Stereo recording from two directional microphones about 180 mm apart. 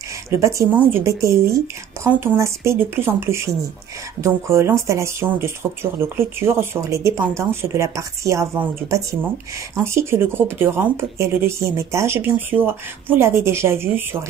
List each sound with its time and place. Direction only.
0.3 s speech: 15° right (ahead or behind)